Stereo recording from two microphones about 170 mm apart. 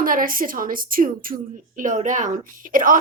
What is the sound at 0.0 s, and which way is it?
A woman's voice, 55° right (ahead or behind).